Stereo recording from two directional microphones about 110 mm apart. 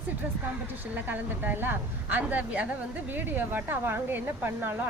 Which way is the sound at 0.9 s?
15° right (ahead or behind).